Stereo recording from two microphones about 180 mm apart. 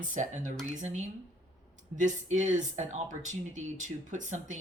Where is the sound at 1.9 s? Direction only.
40° right (ahead or behind).